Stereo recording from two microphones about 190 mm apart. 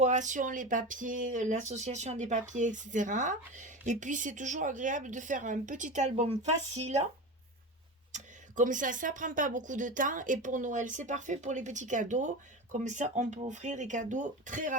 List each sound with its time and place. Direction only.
0.0 s speech: 40° right (ahead or behind)
8.1 s speech: 40° right (ahead or behind)